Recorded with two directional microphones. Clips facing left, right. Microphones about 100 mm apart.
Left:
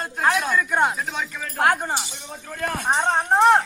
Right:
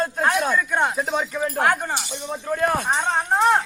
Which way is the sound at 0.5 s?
Centre (ahead or behind).